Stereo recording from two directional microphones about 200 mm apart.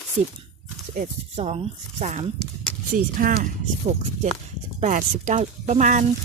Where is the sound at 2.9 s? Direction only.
45° right (ahead or behind).